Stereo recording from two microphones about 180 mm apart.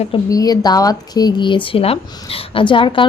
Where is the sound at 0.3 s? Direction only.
20° left (ahead or behind).